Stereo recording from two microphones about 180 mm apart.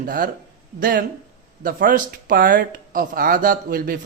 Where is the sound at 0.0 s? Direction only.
50° right (ahead or behind).